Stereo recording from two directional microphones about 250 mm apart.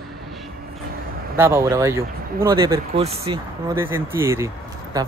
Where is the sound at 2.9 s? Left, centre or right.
Right.